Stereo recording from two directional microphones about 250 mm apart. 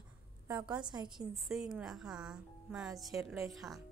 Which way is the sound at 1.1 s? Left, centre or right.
Centre.